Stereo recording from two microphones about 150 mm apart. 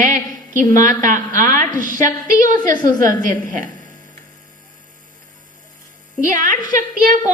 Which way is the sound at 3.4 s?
60° right (ahead or behind).